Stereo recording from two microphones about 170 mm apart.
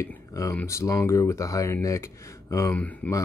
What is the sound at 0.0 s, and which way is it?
Speech, 15° left (ahead or behind).